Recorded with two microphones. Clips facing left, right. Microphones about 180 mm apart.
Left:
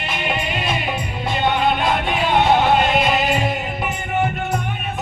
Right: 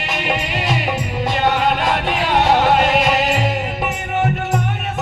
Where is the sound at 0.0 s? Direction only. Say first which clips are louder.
Right 2 dB; 80° right.